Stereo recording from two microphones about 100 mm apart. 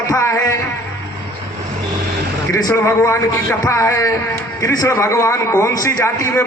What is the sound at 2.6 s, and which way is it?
A man's voice, 30° left (ahead or behind).